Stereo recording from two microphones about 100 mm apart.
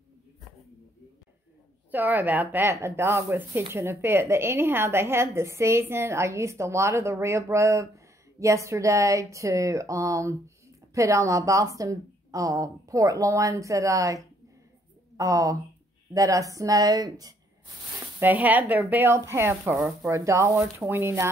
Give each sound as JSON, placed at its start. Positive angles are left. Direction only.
{"t": 1.9, "sound": "a woman's voice", "side_deg": -20}
{"t": 18.2, "sound": "speech", "side_deg": -15}